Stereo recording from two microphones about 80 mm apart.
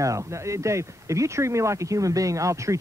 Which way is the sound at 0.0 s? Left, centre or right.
Right.